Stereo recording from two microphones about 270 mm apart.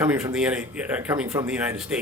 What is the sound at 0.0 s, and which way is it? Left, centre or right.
Speech, centre.